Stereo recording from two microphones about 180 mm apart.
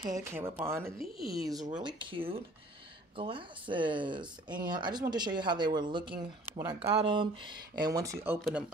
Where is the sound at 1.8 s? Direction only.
25° right (ahead or behind).